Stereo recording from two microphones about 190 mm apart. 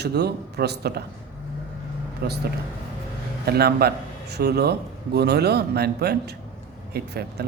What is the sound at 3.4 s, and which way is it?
A man's voice, 55° right (ahead or behind).